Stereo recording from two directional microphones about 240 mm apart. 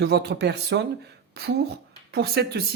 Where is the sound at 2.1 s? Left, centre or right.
Right.